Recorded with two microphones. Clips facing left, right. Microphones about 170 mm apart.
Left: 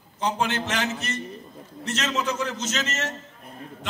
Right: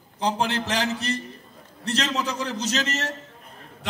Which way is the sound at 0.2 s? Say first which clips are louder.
Right 1 dB; 35° right (ahead or behind).